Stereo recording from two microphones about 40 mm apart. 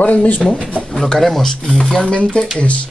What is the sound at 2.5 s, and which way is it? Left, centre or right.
Speech, left.